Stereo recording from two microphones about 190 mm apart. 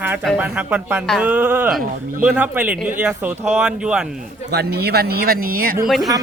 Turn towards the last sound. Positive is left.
turn(degrees=0)  # may be behind; listen again after turning